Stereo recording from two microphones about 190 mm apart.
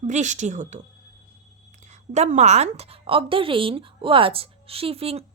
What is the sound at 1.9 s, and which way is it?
A woman's voice, 35° right (ahead or behind).